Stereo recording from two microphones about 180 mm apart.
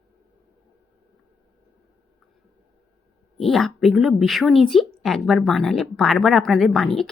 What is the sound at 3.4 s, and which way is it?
A woman's voice, centre (ahead or behind).